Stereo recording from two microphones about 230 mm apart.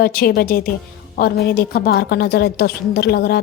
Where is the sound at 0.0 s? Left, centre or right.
Left.